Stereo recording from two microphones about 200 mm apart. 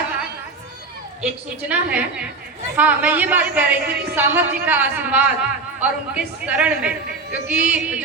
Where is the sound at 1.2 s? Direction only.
5° right (ahead or behind).